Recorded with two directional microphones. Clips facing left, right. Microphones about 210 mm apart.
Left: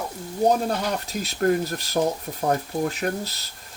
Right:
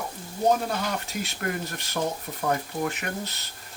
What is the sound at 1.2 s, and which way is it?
Speech, 35° left (ahead or behind).